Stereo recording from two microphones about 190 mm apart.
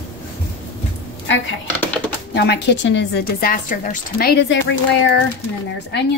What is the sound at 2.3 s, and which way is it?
Speech, 60° left (ahead or behind).